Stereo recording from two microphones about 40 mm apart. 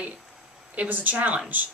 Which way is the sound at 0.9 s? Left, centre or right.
Right.